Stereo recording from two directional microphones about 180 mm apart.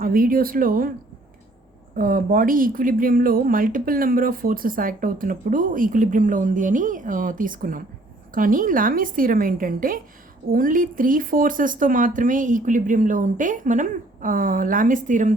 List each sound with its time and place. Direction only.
0.0 s speech: 50° right (ahead or behind)
2.0 s speech: 50° right (ahead or behind)